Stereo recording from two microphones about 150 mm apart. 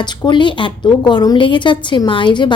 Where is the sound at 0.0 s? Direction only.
30° left (ahead or behind).